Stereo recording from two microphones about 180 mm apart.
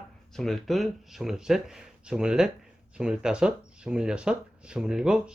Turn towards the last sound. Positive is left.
turn(degrees=-5)  # may be behind; listen again after turning